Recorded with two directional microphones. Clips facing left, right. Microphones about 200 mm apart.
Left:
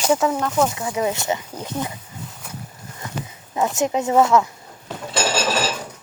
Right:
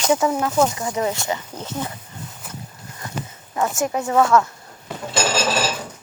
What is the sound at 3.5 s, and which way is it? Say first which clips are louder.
Speech: left 1 dB; 20° left (ahead or behind).